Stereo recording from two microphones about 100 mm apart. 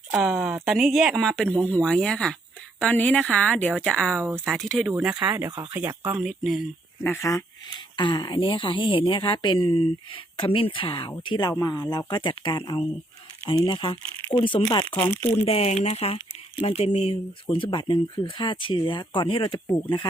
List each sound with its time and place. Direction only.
0.1 s a woman's voice: 10° right (ahead or behind); by 4.1 s 5° left (ahead or behind)
4.1 s speech: 15° right (ahead or behind)
4.4 s speech: centre (ahead or behind)
5.2 s speech: 20° right (ahead or behind)
6.1 s speech: 5° right (ahead or behind)
7.0 s speech: 25° left (ahead or behind)
7.9 s a woman's voice: 45° left (ahead or behind)
11.3 s a woman's voice: 45° left (ahead or behind)
15.0 s speech: 25° left (ahead or behind)
15.4 s speech: 90° left; by 19.5 s 55° left (ahead or behind)